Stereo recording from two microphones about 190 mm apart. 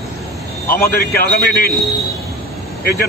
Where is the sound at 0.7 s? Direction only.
50° left (ahead or behind).